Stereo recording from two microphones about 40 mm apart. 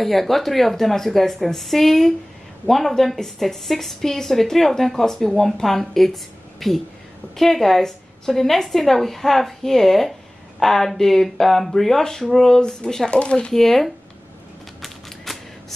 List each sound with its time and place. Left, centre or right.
0.0 s a woman's voice: centre
13.1 s speech: left
13.5 s speech: centre
14.8 s typewriter: centre